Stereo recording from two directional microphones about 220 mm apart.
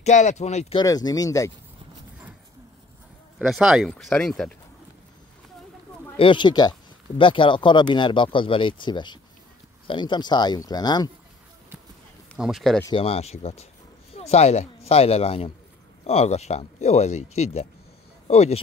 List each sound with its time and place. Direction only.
0.0 s speech: 35° left (ahead or behind)
0.8 s speech: 15° left (ahead or behind)
3.3 s speech: 5° right (ahead or behind)
6.1 s speech: 20° left (ahead or behind)
12.4 s speech: centre (ahead or behind)
12.8 s speech: 25° left (ahead or behind)